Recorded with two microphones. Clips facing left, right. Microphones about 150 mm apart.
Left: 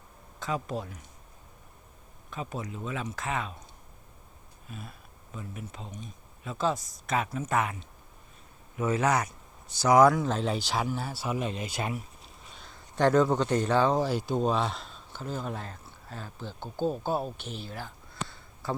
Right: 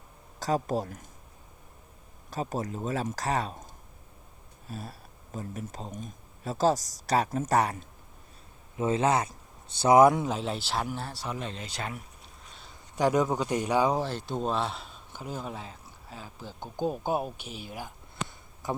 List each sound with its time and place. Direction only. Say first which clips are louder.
0.3 s speech: right 5 dB; 40° right (ahead or behind)
2.3 s speech: right 4 dB; 40° right (ahead or behind)
4.7 s speech: right 4 dB; 35° right (ahead or behind)
8.8 s speech: right 1 dB; 25° right (ahead or behind)
10.2 s speech: left 2 dB; 5° right (ahead or behind); by 11.9 s 15° left (ahead or behind)
12.5 s speech: left 1 dB; 10° right (ahead or behind)
14.0 s speech: left 4 dB; 5° left (ahead or behind); by 18.8 s 20° right (ahead or behind)